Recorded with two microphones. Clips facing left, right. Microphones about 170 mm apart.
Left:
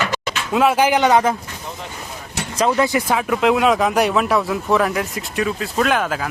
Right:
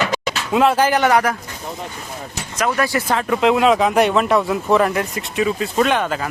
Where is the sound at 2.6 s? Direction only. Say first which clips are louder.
Left 2 dB; 25° left (ahead or behind).